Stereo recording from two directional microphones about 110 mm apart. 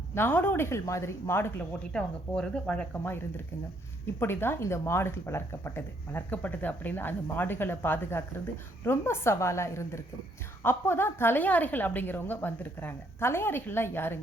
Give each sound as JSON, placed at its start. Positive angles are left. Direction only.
{"t": 0.1, "sound": "speech", "side_deg": 20}
{"t": 1.9, "sound": "speech", "side_deg": 10}
{"t": 3.0, "sound": "speech", "side_deg": 20}